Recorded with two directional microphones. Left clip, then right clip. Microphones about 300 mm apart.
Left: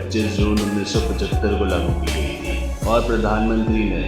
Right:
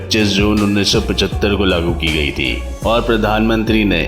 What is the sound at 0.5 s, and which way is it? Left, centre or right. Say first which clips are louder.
Speech: right 6 dB; centre.